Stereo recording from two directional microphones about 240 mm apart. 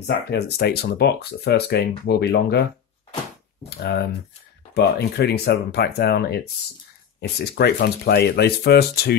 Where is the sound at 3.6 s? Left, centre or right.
Left.